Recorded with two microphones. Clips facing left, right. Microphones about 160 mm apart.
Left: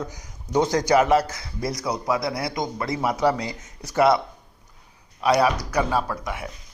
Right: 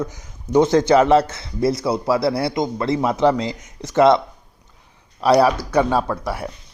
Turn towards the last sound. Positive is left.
turn(degrees=-35)  # may be behind; listen again after turning